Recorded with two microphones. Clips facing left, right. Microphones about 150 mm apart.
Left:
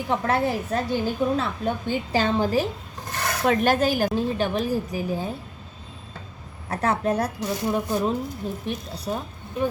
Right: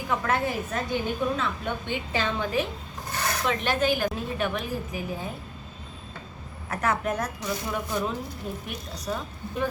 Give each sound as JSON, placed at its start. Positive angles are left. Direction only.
{"t": 0.1, "sound": "a woman's voice", "side_deg": 35}
{"t": 3.4, "sound": "a woman's voice", "side_deg": 50}
{"t": 6.7, "sound": "a woman's voice", "side_deg": 30}